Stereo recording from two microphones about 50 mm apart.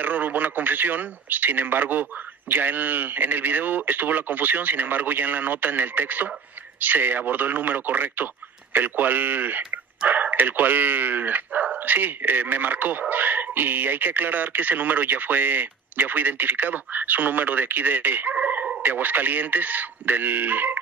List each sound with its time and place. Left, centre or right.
0.0 s a man's voice: right